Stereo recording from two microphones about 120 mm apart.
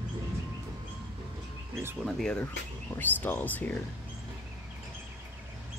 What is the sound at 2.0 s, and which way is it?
Speech, 5° left (ahead or behind).